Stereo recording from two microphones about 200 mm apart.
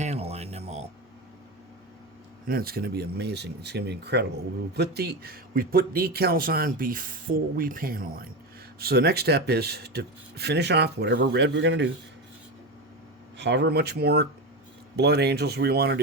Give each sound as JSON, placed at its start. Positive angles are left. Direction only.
{"t": 0.0, "sound": "a sound", "side_deg": -35}
{"t": 2.5, "sound": "a man's voice", "side_deg": -50}
{"t": 13.3, "sound": "speech", "side_deg": -60}